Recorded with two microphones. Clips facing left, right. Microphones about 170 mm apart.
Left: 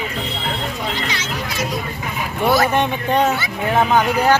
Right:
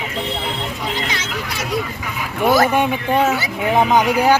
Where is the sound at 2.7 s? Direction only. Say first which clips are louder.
Right 1 dB; 10° right (ahead or behind).